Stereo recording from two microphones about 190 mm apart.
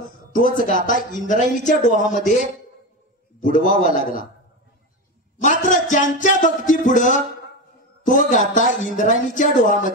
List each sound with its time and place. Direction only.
0.0 s a man's voice: 45° left (ahead or behind)
5.4 s speech: 40° left (ahead or behind)